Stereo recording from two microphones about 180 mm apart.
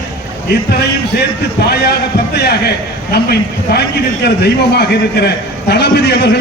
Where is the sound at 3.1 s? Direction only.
65° left (ahead or behind).